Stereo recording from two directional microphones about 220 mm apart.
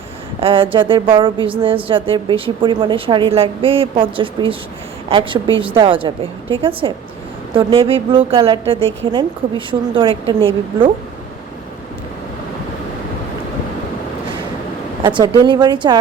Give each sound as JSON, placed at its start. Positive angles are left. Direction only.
{"t": 0.3, "sound": "a woman's voice", "side_deg": -25}
{"t": 15.0, "sound": "a woman's voice", "side_deg": -20}